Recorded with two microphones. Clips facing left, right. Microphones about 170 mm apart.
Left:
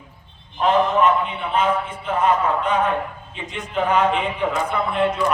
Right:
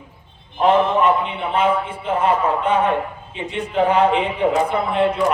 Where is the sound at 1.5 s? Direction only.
30° right (ahead or behind).